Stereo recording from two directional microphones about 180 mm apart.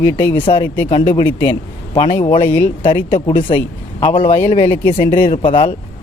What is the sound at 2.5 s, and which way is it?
Speech, 10° left (ahead or behind).